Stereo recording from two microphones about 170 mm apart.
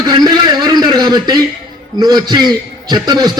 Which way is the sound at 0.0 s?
25° right (ahead or behind).